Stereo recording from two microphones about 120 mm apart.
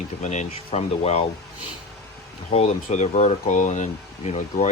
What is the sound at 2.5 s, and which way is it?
Speech, 70° left (ahead or behind).